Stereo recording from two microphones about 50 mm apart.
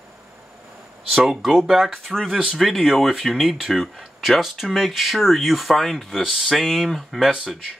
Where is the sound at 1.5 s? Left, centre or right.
Centre.